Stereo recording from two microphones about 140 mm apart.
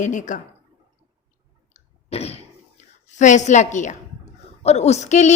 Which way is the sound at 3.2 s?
60° left (ahead or behind).